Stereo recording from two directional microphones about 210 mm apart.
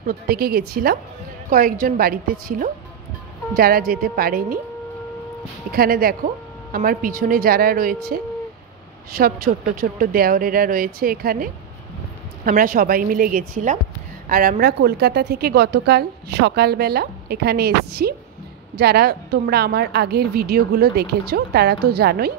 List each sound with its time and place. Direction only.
0.0 s a woman's voice: 45° right (ahead or behind)
5.7 s a woman's voice: 45° right (ahead or behind)